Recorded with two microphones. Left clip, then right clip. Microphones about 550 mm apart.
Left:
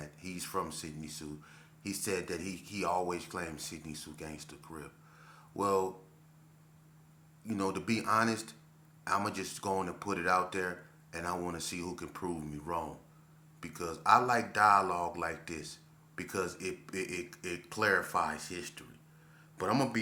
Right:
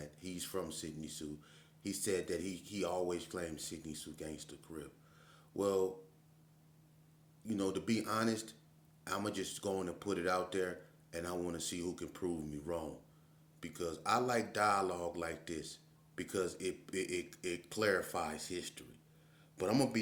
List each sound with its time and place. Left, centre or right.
0.0 s speech: right
7.4 s speech: right